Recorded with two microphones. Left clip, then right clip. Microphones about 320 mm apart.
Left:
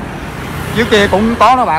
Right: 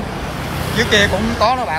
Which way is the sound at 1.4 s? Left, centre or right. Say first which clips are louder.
Left 8 dB; centre.